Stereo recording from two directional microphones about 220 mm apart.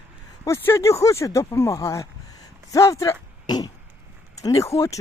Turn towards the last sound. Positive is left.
turn(degrees=15)  # may be behind; listen again after turning